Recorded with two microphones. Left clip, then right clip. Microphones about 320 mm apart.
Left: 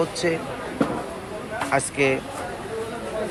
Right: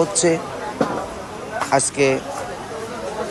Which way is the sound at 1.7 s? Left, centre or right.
Centre.